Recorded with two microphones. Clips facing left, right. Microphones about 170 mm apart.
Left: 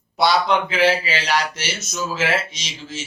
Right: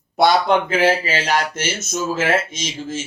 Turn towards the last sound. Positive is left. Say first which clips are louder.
# right 7 dB
turn(degrees=-50)  # may be behind; listen again after turning